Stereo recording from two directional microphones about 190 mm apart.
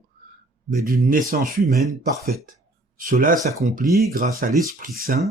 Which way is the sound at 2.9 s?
45° right (ahead or behind).